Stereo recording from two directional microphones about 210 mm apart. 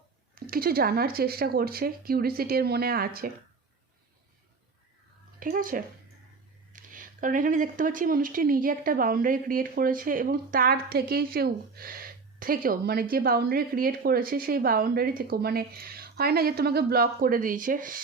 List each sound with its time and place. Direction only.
0.3 s speech: 45° right (ahead or behind)
5.4 s speech: 40° right (ahead or behind)